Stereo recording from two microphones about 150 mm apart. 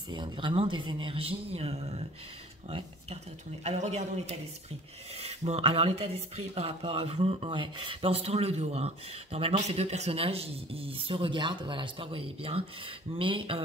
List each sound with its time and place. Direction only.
0.1 s speech: 30° right (ahead or behind)
3.6 s a man's voice: 50° right (ahead or behind)